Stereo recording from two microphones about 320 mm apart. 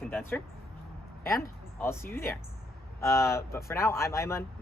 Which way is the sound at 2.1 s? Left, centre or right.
Centre.